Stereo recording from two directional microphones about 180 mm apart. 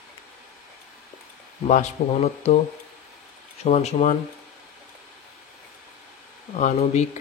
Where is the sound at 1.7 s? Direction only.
40° left (ahead or behind).